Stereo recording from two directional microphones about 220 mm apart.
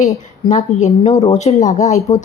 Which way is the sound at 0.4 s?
30° left (ahead or behind).